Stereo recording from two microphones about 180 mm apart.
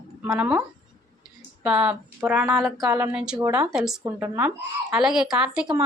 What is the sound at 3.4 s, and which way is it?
Speech, 15° right (ahead or behind).